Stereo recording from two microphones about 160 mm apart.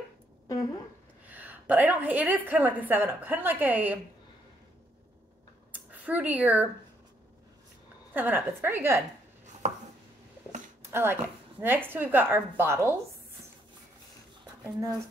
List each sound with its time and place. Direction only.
1.2 s a woman's voice: 10° right (ahead or behind)
5.9 s speech: 10° right (ahead or behind)
8.1 s a woman's voice: 10° right (ahead or behind)
10.8 s a sound: 15° right (ahead or behind)
11.6 s a woman's voice: 15° right (ahead or behind)
14.6 s speech: 20° right (ahead or behind)